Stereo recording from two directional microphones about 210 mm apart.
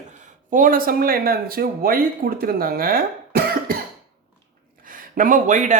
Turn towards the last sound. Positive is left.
turn(degrees=-35)  # may be behind; listen again after turning